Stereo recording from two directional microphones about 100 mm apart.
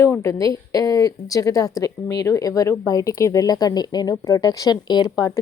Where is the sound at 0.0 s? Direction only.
30° left (ahead or behind).